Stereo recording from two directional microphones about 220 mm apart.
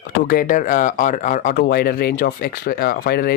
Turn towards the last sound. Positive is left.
turn(degrees=45)  # may be behind; listen again after turning